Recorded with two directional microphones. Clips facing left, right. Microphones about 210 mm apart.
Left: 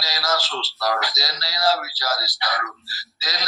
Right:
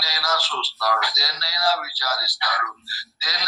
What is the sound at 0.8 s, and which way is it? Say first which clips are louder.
A man's voice: left 1 dB; 25° left (ahead or behind).